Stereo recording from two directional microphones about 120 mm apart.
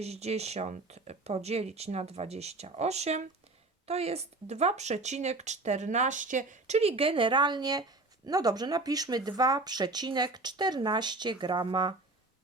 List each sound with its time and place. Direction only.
0.0 s speech: 60° right (ahead or behind); by 11.9 s 40° right (ahead or behind)